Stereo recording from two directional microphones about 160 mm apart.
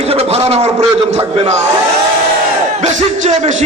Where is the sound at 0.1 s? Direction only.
40° right (ahead or behind).